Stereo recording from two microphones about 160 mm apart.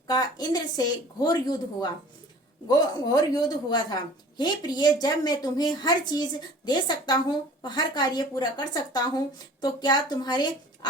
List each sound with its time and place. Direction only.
0.1 s a woman's voice: 25° left (ahead or behind)